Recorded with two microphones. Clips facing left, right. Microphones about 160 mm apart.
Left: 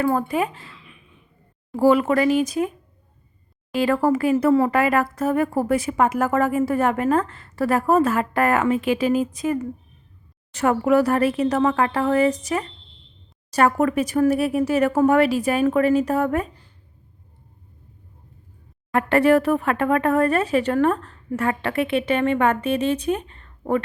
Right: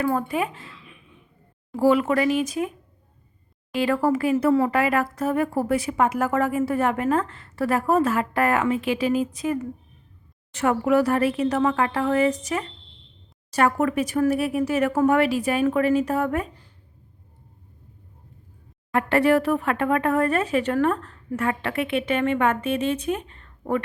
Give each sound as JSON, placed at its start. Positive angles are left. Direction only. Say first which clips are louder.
{"t": 0.0, "sound": "a woman's voice", "louder": "left 3 dB", "side_deg": 35}
{"t": 1.7, "sound": "a woman's voice", "louder": "left 2 dB", "side_deg": 40}
{"t": 18.9, "sound": "a woman's voice", "louder": "left 2 dB", "side_deg": 45}